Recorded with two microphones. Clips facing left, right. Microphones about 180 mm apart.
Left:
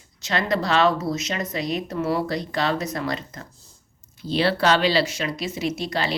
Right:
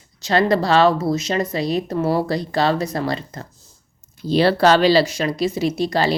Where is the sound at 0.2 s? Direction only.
35° right (ahead or behind).